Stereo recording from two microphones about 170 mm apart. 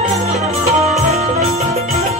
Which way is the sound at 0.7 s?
40° right (ahead or behind).